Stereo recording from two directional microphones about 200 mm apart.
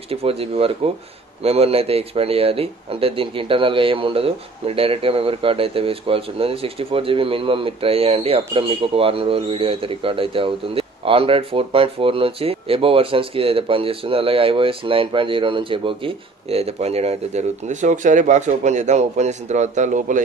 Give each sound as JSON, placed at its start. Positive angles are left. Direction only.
{"t": 0.1, "sound": "speech", "side_deg": -30}